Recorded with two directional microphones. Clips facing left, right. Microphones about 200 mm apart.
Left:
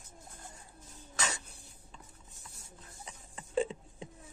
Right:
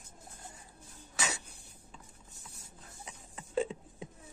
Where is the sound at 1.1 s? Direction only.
10° right (ahead or behind).